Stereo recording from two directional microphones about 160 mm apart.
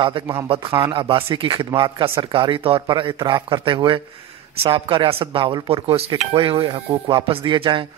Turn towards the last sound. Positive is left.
turn(degrees=-30)  # may be behind; listen again after turning